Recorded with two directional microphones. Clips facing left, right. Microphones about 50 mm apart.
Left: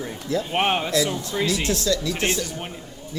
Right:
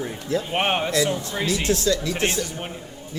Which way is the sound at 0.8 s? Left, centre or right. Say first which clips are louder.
Right 1 dB; right.